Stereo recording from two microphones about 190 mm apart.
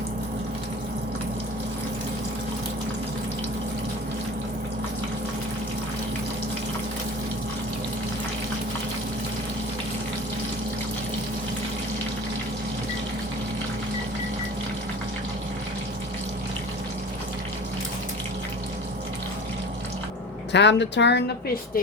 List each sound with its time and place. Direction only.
20.5 s a woman's voice: 65° left (ahead or behind)